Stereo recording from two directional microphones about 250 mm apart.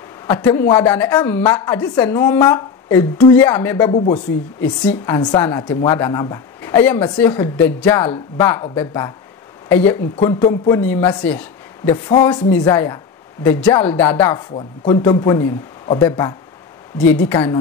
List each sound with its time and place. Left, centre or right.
0.4 s a woman's voice: centre
11.2 s a sound: centre
11.9 s a woman's voice: centre